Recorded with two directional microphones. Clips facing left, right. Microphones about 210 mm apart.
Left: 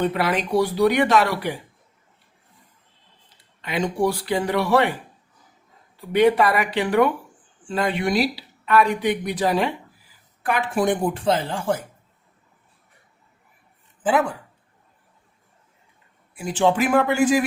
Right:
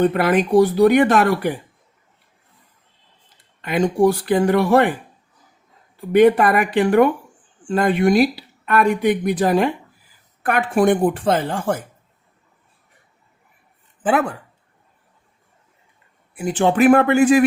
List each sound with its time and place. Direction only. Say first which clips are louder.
0.0 s speech: right 6 dB; 50° right (ahead or behind)
3.6 s speech: right 6 dB; 50° right (ahead or behind)
6.1 s speech: right 4 dB; 50° right (ahead or behind)
14.0 s speech: right 2 dB; 65° right (ahead or behind)
16.4 s speech: right 4 dB; 55° right (ahead or behind)